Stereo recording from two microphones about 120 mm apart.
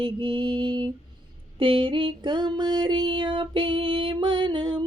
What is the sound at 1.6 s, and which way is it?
Female singing, 45° right (ahead or behind).